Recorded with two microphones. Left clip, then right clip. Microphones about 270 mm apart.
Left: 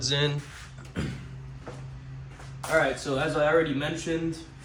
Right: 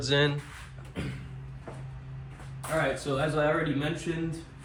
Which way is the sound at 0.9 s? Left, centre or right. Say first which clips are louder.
Left 3 dB; left.